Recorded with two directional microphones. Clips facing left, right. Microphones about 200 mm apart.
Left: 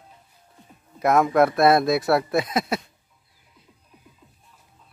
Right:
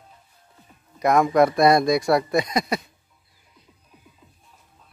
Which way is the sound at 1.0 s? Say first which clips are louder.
Right 1 dB; 5° left (ahead or behind).